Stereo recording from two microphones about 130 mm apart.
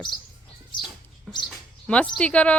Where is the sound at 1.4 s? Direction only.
10° left (ahead or behind).